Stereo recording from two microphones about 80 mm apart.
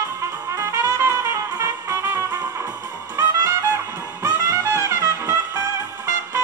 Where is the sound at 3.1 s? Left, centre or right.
Right.